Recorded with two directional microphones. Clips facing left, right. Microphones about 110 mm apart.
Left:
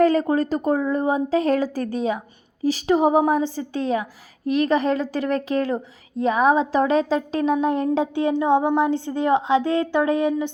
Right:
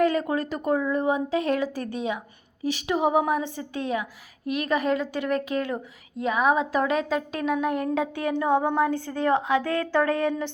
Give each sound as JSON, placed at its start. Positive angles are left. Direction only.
{"t": 0.0, "sound": "a woman's voice", "side_deg": 35}